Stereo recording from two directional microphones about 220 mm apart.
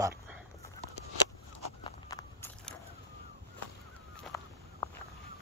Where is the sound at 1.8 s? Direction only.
15° left (ahead or behind).